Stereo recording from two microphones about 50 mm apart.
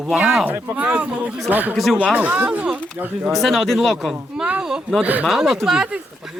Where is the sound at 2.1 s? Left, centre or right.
Right.